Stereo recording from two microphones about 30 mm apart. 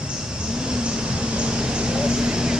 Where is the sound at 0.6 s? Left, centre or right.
Right.